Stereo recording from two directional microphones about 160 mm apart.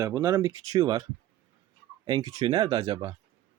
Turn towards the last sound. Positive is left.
turn(degrees=-25)  # may be behind; listen again after turning